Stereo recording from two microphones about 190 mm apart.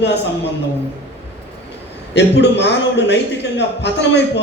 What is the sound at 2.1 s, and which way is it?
A man's voice, 65° left (ahead or behind).